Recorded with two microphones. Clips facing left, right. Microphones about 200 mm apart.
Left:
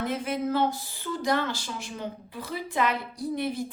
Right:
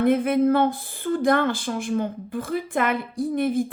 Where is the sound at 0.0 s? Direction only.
55° right (ahead or behind).